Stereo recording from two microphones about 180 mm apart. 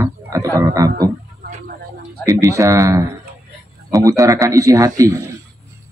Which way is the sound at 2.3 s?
15° right (ahead or behind).